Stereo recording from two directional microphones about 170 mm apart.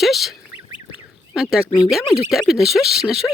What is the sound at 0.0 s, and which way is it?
Speech, centre (ahead or behind).